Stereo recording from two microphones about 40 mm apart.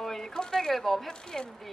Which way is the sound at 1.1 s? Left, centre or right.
Centre.